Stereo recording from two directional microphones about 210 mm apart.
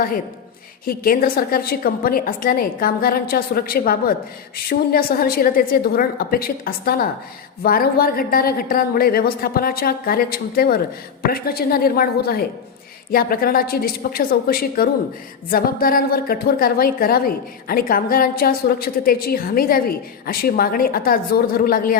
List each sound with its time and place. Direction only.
0.9 s a woman's voice: 45° left (ahead or behind)